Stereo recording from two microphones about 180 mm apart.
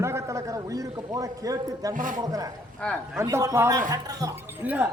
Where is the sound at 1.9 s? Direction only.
45° right (ahead or behind).